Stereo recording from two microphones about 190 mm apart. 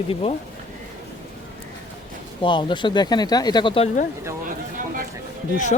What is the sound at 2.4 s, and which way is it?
Speech, 25° left (ahead or behind).